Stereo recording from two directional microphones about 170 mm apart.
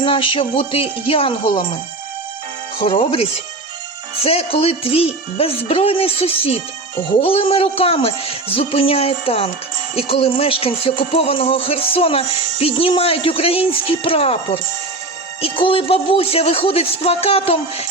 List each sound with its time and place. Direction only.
0.0 s speech: 30° left (ahead or behind)
2.8 s speech: 30° left (ahead or behind)